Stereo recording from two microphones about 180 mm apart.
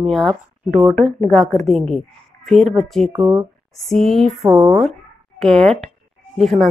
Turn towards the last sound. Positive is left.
turn(degrees=0)  # may be behind; listen again after turning